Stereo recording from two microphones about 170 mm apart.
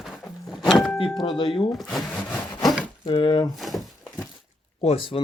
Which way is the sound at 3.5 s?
Centre (ahead or behind).